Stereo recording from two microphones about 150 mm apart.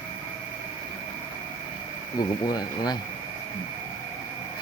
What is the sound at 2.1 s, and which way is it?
Speech, 25° left (ahead or behind).